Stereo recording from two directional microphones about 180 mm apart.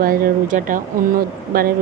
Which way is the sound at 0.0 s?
55° right (ahead or behind).